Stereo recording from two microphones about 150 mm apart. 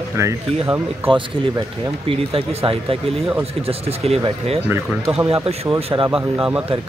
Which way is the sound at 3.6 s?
40° right (ahead or behind).